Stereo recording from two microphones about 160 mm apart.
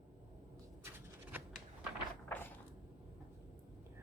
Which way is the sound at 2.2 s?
10° left (ahead or behind).